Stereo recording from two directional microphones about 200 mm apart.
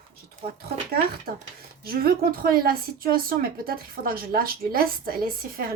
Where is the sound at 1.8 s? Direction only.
50° right (ahead or behind).